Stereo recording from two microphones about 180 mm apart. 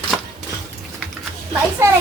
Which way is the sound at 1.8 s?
15° right (ahead or behind).